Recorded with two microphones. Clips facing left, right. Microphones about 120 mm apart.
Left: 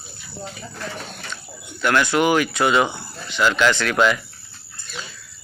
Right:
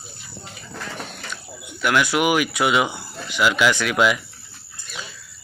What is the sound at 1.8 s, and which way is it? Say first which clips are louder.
Speech: left 1 dB; 10° right (ahead or behind).